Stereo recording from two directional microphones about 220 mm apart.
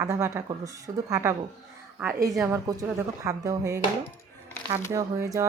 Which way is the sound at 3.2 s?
15° right (ahead or behind).